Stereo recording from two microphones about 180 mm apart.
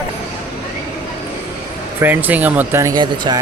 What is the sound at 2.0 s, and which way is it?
Speech, 10° right (ahead or behind).